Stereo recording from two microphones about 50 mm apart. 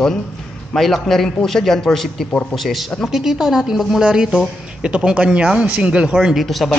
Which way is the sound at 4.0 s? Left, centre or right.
Centre.